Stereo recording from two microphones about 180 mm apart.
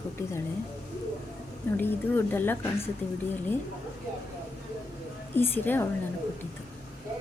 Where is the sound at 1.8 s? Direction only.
10° left (ahead or behind).